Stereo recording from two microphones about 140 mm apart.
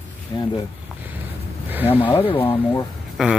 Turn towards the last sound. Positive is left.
turn(degrees=-5)  # may be behind; listen again after turning